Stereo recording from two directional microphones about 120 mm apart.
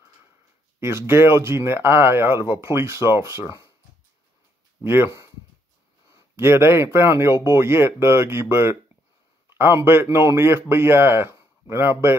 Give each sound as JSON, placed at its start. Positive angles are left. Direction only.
{"t": 0.7, "sound": "speech", "side_deg": -20}
{"t": 4.8, "sound": "speech", "side_deg": -20}